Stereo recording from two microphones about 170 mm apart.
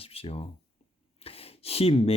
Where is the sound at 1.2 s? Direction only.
35° left (ahead or behind).